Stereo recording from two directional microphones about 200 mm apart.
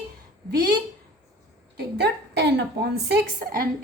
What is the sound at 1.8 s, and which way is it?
A woman's voice, 55° right (ahead or behind).